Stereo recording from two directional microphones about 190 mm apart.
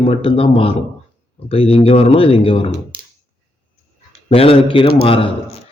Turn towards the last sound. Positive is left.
turn(degrees=30)  # may be behind; listen again after turning